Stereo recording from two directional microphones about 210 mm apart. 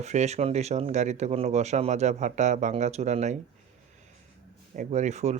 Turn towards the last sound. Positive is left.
turn(degrees=-35)  # may be behind; listen again after turning